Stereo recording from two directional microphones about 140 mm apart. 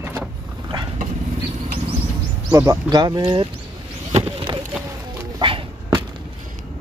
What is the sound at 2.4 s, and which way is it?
Speech, 25° right (ahead or behind).